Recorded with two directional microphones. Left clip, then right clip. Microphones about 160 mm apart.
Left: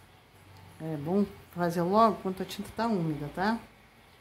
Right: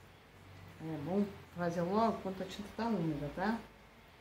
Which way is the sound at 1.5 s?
55° left (ahead or behind).